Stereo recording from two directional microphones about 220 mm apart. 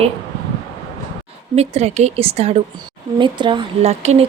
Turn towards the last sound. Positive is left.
turn(degrees=-30)  # may be behind; listen again after turning